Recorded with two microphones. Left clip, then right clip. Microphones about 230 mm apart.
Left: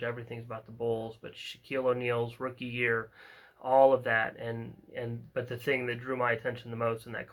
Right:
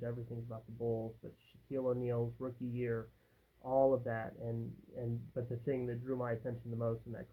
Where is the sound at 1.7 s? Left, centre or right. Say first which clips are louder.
Left 7 dB; centre.